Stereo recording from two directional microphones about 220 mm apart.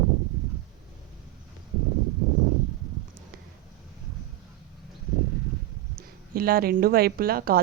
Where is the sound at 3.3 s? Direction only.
45° right (ahead or behind).